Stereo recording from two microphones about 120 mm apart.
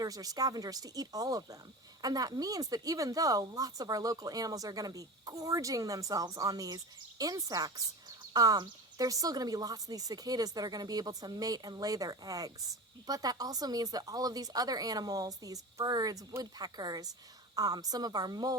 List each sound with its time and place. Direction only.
0.0 s speech: 30° right (ahead or behind)